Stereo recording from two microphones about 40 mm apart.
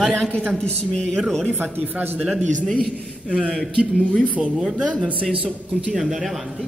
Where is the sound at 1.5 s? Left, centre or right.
Right.